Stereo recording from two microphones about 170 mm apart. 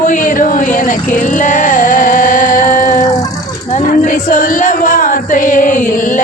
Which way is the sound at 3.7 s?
50° left (ahead or behind).